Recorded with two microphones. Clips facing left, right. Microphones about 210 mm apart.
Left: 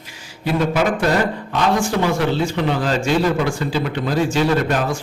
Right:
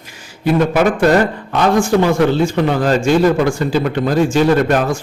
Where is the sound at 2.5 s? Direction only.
45° right (ahead or behind).